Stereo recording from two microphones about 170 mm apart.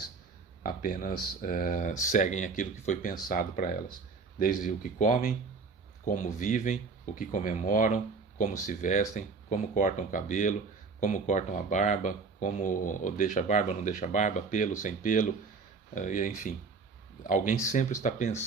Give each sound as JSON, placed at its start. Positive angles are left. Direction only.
{"t": 0.6, "sound": "speech", "side_deg": 60}